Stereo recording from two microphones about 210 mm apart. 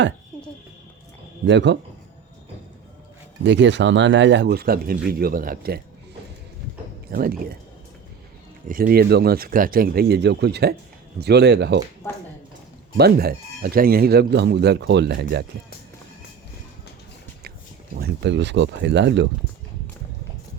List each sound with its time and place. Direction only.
1.5 s speech: 55° right (ahead or behind)
3.4 s speech: 55° right (ahead or behind)
7.1 s speech: 45° right (ahead or behind)
8.6 s speech: 40° right (ahead or behind)
13.0 s speech: 45° right (ahead or behind)
17.9 s speech: 50° right (ahead or behind)